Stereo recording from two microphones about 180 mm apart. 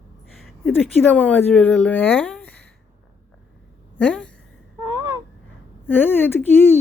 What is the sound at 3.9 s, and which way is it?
Speech, 5° left (ahead or behind).